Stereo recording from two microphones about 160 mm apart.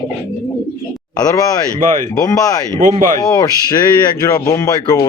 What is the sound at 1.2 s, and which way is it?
Speech, 20° left (ahead or behind).